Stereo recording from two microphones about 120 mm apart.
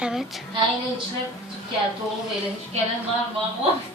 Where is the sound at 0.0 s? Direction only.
Centre (ahead or behind).